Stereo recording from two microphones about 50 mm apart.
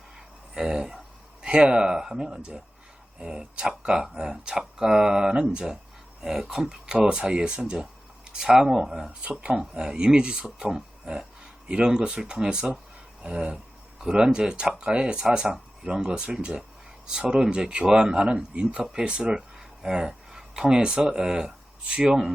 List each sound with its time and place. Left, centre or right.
0.5 s speech: centre
9.2 s speech: right